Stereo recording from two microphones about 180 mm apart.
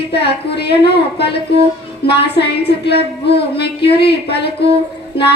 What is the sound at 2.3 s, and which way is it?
A woman's voice, 65° left (ahead or behind).